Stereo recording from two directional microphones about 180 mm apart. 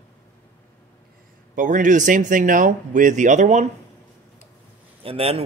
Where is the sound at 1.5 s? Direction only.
45° right (ahead or behind).